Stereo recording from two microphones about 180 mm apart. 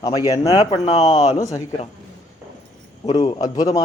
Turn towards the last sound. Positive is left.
turn(degrees=20)  # may be behind; listen again after turning